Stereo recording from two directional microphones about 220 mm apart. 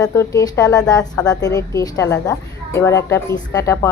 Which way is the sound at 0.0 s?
15° left (ahead or behind).